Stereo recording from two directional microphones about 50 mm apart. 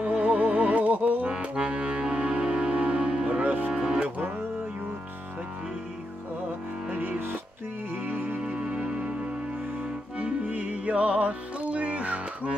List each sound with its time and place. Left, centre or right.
0.0 s music: right
3.7 s music: right
6.9 s music: right
8.5 s music: right
10.2 s music: right